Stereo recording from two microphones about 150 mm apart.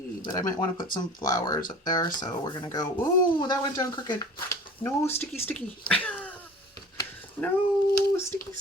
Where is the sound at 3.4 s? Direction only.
25° left (ahead or behind); by 6.3 s 10° left (ahead or behind).